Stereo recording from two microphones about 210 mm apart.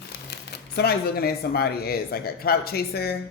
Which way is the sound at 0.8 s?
50° left (ahead or behind).